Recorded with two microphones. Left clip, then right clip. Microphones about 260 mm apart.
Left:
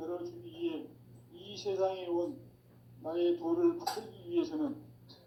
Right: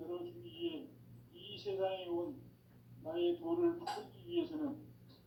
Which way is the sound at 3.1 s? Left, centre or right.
Left.